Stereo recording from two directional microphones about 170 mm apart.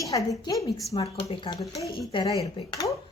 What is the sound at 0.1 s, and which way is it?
Speech, 20° left (ahead or behind).